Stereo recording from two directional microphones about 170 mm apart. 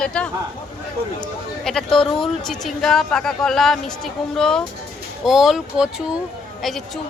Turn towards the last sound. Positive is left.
turn(degrees=0)  # may be behind; listen again after turning